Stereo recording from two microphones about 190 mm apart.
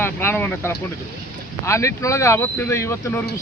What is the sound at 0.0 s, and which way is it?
Speech, 10° left (ahead or behind).